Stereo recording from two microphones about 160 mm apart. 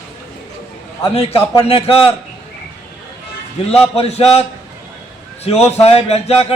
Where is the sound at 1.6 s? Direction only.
40° left (ahead or behind).